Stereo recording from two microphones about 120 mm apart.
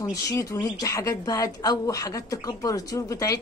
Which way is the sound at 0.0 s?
30° left (ahead or behind).